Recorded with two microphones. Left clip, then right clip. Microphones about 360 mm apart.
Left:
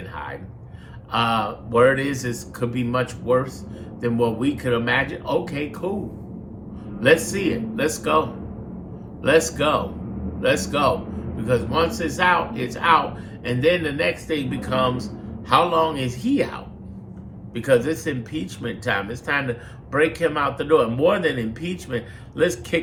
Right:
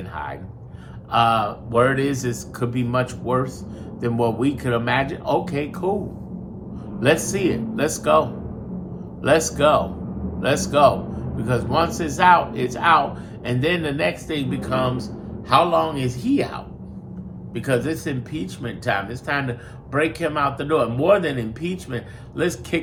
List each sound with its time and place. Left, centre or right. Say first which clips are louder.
1.1 s speech: right 3 dB; centre
7.0 s speech: left 1 dB; centre